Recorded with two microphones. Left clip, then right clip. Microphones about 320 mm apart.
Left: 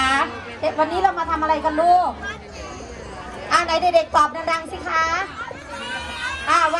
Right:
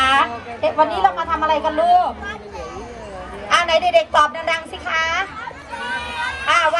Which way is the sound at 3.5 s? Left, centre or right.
Centre.